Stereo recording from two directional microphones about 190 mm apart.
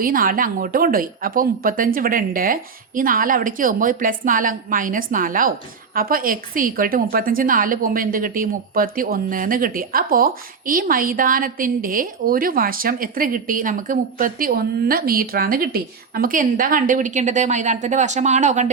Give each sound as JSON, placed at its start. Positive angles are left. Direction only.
{"t": 0.0, "sound": "a woman's voice", "side_deg": -50}